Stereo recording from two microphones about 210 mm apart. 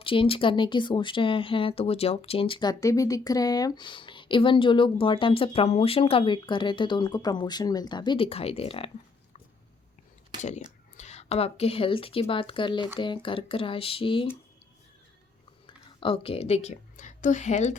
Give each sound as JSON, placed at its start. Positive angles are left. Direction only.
{"t": 0.0, "sound": "speech", "side_deg": 25}
{"t": 10.9, "sound": "speech", "side_deg": 30}
{"t": 15.6, "sound": "a woman's voice", "side_deg": 25}